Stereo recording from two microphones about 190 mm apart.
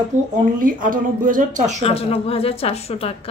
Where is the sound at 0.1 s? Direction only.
40° right (ahead or behind).